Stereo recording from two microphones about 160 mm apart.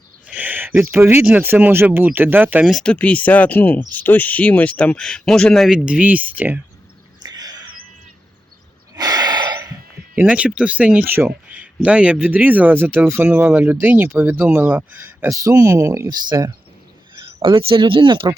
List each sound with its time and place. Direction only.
0.3 s speech: 10° right (ahead or behind)
2.7 s speech: 5° left (ahead or behind); by 6.6 s 10° right (ahead or behind)
7.3 s a sound: 25° right (ahead or behind)
9.0 s gasp: 25° right (ahead or behind)
10.2 s speech: 10° right (ahead or behind); by 16.6 s 25° right (ahead or behind)
17.4 s speech: 35° right (ahead or behind)